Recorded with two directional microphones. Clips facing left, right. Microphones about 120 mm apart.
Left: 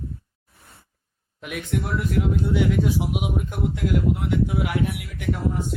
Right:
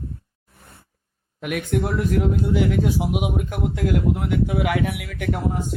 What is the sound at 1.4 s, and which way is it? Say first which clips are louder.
Speech: right 5 dB; 55° right (ahead or behind).